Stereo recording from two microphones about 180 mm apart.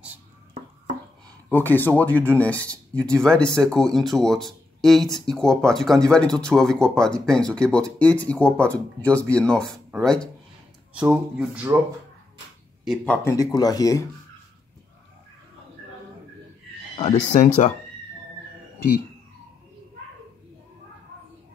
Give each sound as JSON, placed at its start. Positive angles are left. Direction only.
{"t": 1.5, "sound": "speech", "side_deg": 10}
{"t": 11.0, "sound": "speech", "side_deg": -10}
{"t": 12.8, "sound": "speech", "side_deg": 5}
{"t": 17.0, "sound": "speech", "side_deg": 40}